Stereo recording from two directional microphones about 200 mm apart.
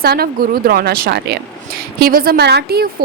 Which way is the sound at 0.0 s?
50° right (ahead or behind).